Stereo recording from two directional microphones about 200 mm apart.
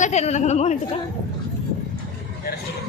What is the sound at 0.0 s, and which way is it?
Speech, 35° left (ahead or behind).